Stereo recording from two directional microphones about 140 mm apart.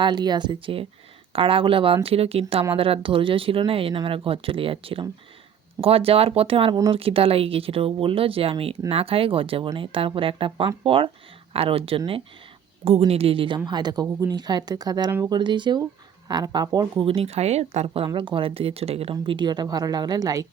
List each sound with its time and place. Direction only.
0.0 s a woman's voice: 30° right (ahead or behind)